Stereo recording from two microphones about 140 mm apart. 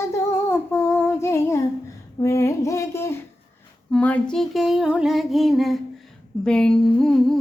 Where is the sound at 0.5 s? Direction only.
15° left (ahead or behind).